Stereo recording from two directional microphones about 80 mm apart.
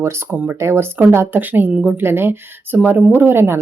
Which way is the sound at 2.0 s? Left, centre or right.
Right.